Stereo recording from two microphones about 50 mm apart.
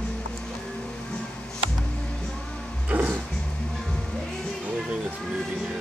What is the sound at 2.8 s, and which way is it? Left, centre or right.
Music, right.